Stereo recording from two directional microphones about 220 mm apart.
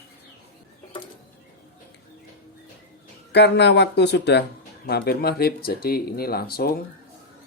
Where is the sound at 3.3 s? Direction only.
50° left (ahead or behind).